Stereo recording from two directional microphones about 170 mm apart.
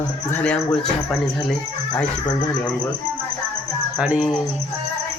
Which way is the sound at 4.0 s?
5° right (ahead or behind).